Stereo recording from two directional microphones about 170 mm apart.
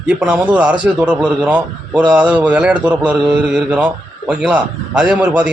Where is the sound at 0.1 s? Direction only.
5° right (ahead or behind).